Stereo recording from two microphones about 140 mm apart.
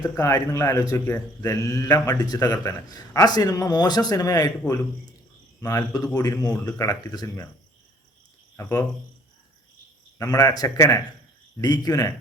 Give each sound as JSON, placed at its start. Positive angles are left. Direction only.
{"t": 0.0, "sound": "speech", "side_deg": 20}
{"t": 5.5, "sound": "speech", "side_deg": 25}
{"t": 8.5, "sound": "speech", "side_deg": 25}
{"t": 10.2, "sound": "speech", "side_deg": 25}